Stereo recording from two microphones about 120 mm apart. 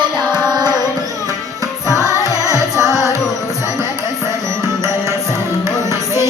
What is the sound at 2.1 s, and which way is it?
Carnatic music, 25° right (ahead or behind).